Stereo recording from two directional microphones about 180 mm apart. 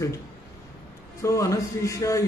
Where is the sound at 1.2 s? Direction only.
15° left (ahead or behind).